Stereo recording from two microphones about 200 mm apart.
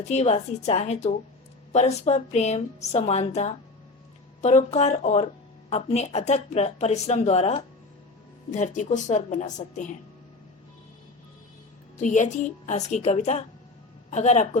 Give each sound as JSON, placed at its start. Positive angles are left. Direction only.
{"t": 0.0, "sound": "speech", "side_deg": 35}
{"t": 11.9, "sound": "speech", "side_deg": 35}